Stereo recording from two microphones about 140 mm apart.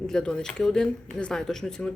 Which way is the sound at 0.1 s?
5° left (ahead or behind).